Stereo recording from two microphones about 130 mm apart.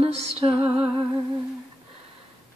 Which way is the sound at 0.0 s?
50° right (ahead or behind).